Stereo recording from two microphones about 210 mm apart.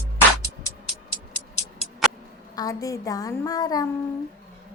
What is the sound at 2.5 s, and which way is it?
A woman's voice, 15° left (ahead or behind).